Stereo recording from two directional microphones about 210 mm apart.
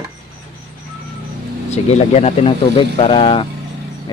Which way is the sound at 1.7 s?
35° left (ahead or behind).